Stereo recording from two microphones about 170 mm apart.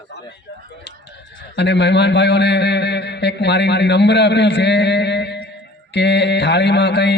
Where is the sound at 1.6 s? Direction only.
90° left.